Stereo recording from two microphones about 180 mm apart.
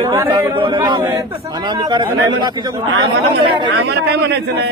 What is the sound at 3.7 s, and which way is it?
Speech, 75° right (ahead or behind).